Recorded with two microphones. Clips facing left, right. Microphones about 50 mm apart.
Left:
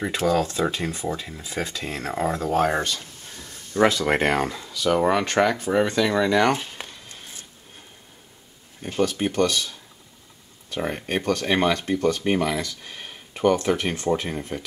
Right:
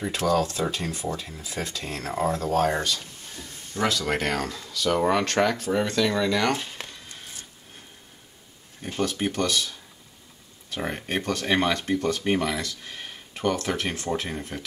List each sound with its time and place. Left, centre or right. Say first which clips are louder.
0.2 s speech: left 2 dB; centre
2.3 s speech: left 3 dB; left
3.9 s speech: left 5 dB; left
6.6 s a sound: left 1 dB; centre
8.9 s speech: left 4 dB; centre